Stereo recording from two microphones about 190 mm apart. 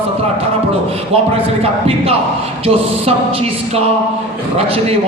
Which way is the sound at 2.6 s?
30° right (ahead or behind).